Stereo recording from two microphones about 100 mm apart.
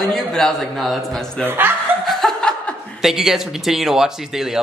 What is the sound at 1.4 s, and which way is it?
Speech, 20° right (ahead or behind).